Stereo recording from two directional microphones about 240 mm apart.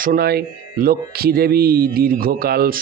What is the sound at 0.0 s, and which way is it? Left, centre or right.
Speech, right.